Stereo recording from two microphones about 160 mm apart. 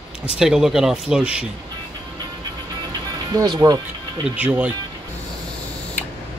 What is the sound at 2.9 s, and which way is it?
Music, 25° right (ahead or behind).